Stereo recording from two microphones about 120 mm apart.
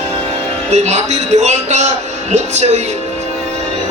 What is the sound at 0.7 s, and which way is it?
A man's voice, 70° right (ahead or behind).